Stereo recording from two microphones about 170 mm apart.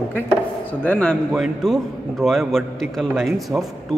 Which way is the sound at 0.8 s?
5° left (ahead or behind).